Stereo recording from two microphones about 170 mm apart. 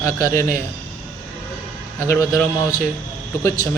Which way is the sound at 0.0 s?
15° left (ahead or behind).